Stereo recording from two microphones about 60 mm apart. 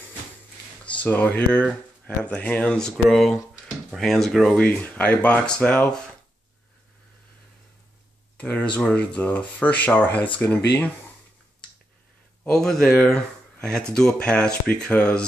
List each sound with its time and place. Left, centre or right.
0.9 s speech: left
2.7 s speech: centre
4.6 s speech: left
8.4 s speech: left
12.4 s speech: centre